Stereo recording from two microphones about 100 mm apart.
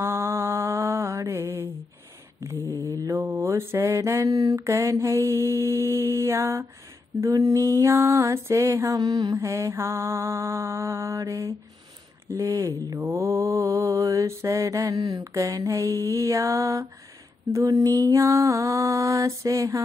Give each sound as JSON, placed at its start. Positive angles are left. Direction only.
{"t": 0.0, "sound": "mantra", "side_deg": -25}